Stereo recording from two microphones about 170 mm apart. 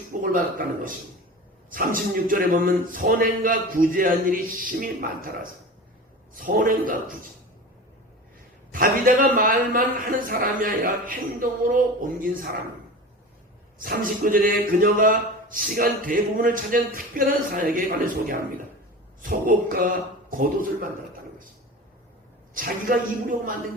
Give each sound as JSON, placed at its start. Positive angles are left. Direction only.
{"t": 0.1, "sound": "a sound", "side_deg": -55}
{"t": 0.6, "sound": "speech", "side_deg": -60}
{"t": 8.7, "sound": "speech", "side_deg": -55}
{"t": 13.7, "sound": "speech", "side_deg": -55}
{"t": 22.5, "sound": "speech", "side_deg": -55}